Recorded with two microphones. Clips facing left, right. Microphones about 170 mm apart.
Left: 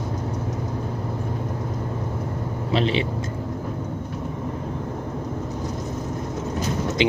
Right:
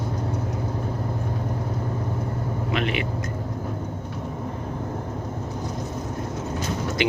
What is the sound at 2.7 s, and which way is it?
Speech, 30° left (ahead or behind).